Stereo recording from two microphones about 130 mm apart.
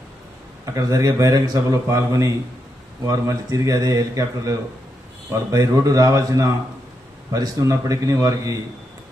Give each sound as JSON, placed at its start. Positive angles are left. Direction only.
{"t": 0.6, "sound": "speech", "side_deg": -25}